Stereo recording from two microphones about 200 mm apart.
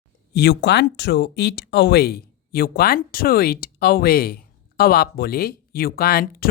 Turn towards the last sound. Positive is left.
turn(degrees=50)  # may be behind; listen again after turning